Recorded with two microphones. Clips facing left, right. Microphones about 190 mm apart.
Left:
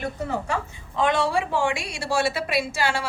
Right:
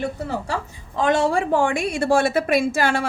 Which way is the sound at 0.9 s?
45° right (ahead or behind).